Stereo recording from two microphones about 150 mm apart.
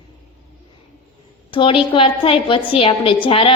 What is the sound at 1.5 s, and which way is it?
A woman's voice, 35° left (ahead or behind).